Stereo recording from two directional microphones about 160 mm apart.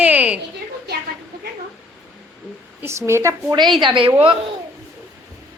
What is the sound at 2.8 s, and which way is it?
A woman's voice, 15° right (ahead or behind).